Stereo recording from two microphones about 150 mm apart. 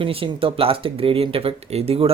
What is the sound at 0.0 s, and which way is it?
Speech, 35° right (ahead or behind).